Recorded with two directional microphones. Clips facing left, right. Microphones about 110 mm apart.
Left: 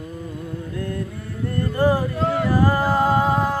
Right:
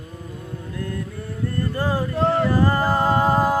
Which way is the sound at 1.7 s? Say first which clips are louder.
Left 8 dB; 15° left (ahead or behind).